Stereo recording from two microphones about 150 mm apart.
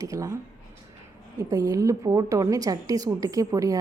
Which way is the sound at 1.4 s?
25° right (ahead or behind).